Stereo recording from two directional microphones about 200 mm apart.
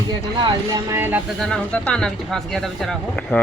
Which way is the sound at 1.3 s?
5° left (ahead or behind).